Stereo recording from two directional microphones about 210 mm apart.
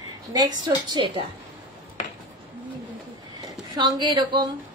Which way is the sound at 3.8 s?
20° right (ahead or behind).